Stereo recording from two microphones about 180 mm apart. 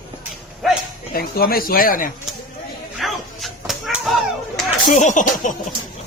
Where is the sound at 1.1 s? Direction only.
55° left (ahead or behind).